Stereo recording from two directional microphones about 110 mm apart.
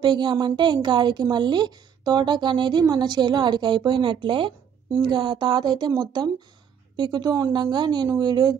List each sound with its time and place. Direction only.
0.0 s a woman's voice: 45° right (ahead or behind)